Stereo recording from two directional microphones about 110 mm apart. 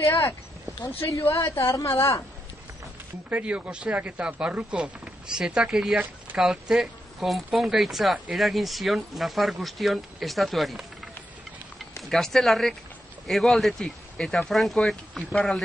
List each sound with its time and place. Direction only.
0.9 s a woman's voice: 25° left (ahead or behind)
3.3 s speech: 10° right (ahead or behind)
12.0 s speech: centre (ahead or behind)